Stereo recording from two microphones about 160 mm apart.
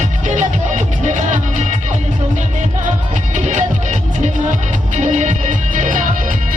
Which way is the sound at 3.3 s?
50° right (ahead or behind).